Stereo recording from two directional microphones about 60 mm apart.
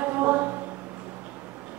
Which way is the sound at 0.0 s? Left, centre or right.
Right.